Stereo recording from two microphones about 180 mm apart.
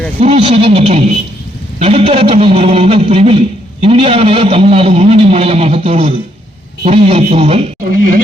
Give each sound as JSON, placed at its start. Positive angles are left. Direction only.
{"t": 0.2, "sound": "a man's voice", "side_deg": -30}